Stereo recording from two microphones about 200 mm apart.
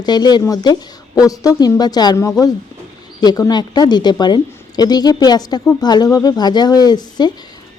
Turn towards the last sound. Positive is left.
turn(degrees=20)  # may be behind; listen again after turning